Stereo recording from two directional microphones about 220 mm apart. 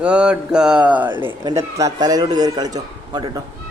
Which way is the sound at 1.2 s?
15° right (ahead or behind).